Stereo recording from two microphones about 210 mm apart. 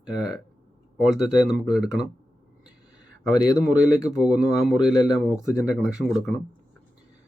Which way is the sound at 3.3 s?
20° left (ahead or behind).